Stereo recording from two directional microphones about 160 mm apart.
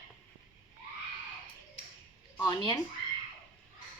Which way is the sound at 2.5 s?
25° left (ahead or behind).